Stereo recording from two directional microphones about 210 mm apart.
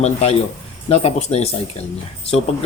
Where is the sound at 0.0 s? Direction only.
30° left (ahead or behind).